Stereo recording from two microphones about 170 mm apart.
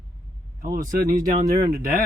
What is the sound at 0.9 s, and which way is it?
Speech, 50° right (ahead or behind).